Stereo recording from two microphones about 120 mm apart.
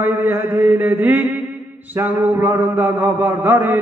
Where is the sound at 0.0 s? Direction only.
15° right (ahead or behind).